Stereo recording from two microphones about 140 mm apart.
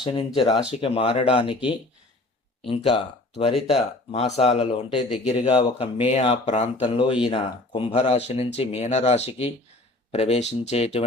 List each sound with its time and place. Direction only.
0.0 s speech: 35° left (ahead or behind); by 6.8 s 55° left (ahead or behind)
6.8 s speech: 40° left (ahead or behind)